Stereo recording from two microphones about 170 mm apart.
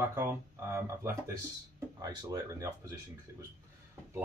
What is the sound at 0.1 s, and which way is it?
Speech, 15° right (ahead or behind).